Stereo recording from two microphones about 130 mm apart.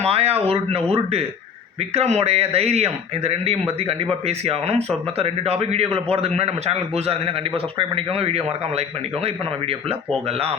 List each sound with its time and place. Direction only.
0.0 s a man's voice: 50° right (ahead or behind)